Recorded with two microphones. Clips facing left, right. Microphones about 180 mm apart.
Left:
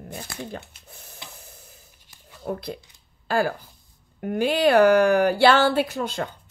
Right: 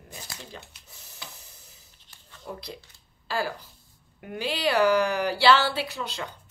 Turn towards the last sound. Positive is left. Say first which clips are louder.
# left 8 dB
turn(degrees=50)  # may be behind; listen again after turning